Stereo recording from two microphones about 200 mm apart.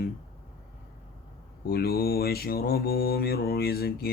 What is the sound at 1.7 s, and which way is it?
Mantra, 50° left (ahead or behind).